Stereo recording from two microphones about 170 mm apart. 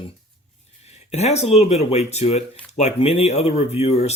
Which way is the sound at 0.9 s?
40° left (ahead or behind).